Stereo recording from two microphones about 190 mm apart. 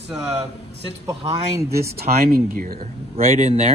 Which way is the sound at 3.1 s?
35° right (ahead or behind).